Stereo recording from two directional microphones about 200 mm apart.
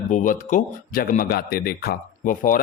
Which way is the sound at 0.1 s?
40° left (ahead or behind).